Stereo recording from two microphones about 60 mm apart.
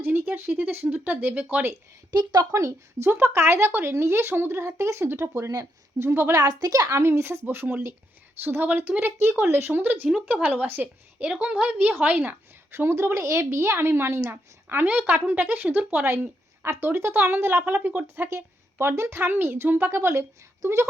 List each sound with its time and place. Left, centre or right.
0.0 s a sound: right
0.9 s speech: right
2.5 s a woman's voice: right
3.1 s speech: right
3.3 s a woman's voice: right
6.3 s a woman's voice: right
11.2 s speech: right
12.7 s a woman's voice: right
18.3 s a woman's voice: right